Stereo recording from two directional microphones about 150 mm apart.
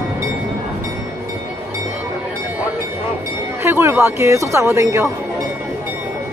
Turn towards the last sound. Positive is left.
turn(degrees=-20)  # may be behind; listen again after turning